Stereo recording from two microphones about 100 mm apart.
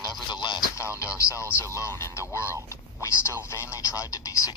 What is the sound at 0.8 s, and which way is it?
Speech, 30° left (ahead or behind).